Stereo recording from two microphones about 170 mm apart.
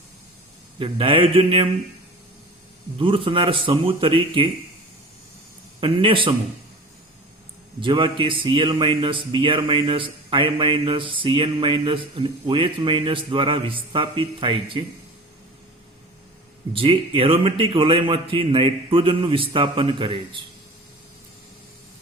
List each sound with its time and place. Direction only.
0.8 s speech: 30° right (ahead or behind)
3.0 s speech: 30° right (ahead or behind)
5.8 s speech: 30° right (ahead or behind)
7.8 s speech: 30° right (ahead or behind)
16.7 s speech: 30° right (ahead or behind)